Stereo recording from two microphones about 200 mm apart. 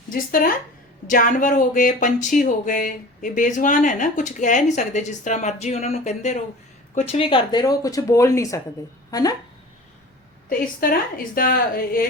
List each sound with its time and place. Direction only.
0.1 s a woman's voice: 45° left (ahead or behind); by 9.3 s 20° left (ahead or behind)
10.6 s a woman's voice: 45° left (ahead or behind)